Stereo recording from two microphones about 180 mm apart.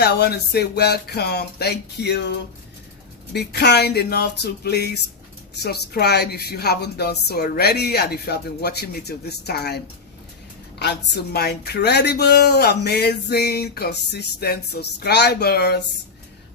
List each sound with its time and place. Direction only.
0.0 s speech: 65° left (ahead or behind)
3.3 s speech: 65° left (ahead or behind)